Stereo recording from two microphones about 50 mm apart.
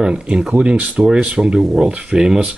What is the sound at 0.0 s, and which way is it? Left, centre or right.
Speech, centre.